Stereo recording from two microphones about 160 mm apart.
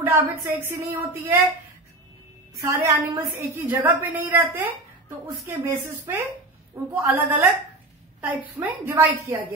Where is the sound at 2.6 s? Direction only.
20° right (ahead or behind).